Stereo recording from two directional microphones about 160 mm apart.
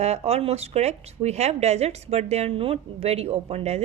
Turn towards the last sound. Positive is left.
turn(degrees=-40)  # may be behind; listen again after turning